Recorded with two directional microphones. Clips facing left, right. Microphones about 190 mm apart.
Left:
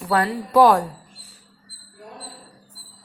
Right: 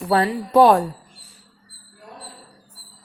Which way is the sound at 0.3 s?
25° right (ahead or behind).